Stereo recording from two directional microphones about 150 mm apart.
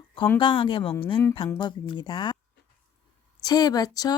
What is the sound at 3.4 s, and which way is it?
Speech, 25° left (ahead or behind).